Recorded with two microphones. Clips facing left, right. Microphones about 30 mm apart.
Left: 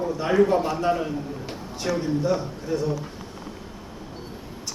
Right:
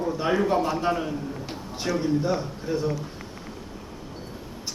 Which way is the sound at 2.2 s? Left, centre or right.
Centre.